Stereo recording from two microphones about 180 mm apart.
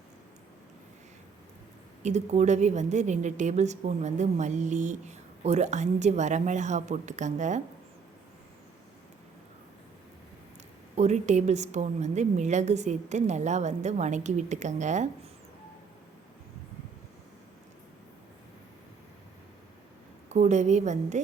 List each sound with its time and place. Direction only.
2.0 s a woman's voice: 40° right (ahead or behind)
10.9 s a woman's voice: 40° right (ahead or behind)
20.3 s a woman's voice: 40° right (ahead or behind)